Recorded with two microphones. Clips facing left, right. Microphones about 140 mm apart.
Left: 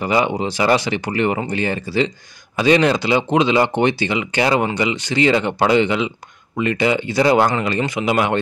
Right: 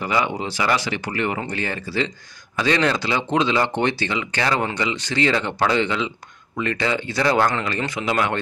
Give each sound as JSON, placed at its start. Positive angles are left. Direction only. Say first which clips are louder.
{"t": 0.0, "sound": "speech", "louder": "left 4 dB", "side_deg": 20}